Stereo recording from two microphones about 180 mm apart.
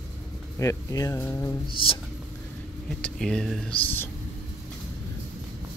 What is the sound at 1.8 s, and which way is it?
Speech, 30° left (ahead or behind).